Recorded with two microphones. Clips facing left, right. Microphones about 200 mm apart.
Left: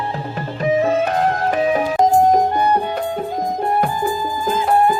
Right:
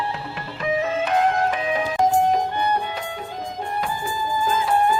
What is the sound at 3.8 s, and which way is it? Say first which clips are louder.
Music: left 6 dB; 50° left (ahead or behind).